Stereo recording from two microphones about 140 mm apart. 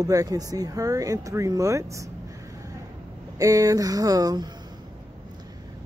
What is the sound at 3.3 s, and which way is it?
Speech, 25° right (ahead or behind).